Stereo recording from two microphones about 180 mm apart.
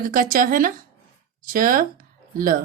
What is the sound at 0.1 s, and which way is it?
Speech, 50° right (ahead or behind).